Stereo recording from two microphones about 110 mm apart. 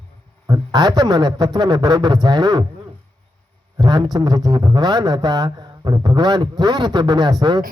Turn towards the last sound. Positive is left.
turn(degrees=-35)  # may be behind; listen again after turning